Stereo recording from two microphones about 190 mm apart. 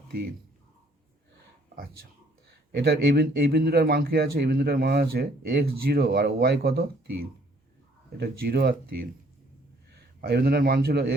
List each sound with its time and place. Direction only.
2.7 s speech: 60° right (ahead or behind)
8.2 s speech: 55° right (ahead or behind)
10.2 s speech: 55° right (ahead or behind)